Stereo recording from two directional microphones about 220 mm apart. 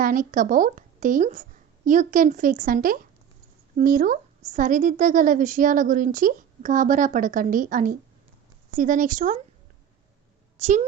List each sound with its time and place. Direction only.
0.0 s a woman's voice: 40° right (ahead or behind)
10.6 s a woman's voice: 35° right (ahead or behind)